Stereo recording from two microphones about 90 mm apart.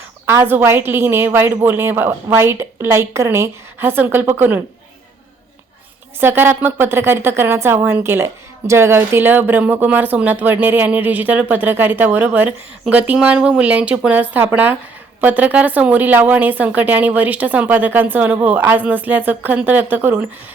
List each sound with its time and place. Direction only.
0.3 s a woman's voice: 25° right (ahead or behind)
6.1 s a woman's voice: 25° right (ahead or behind)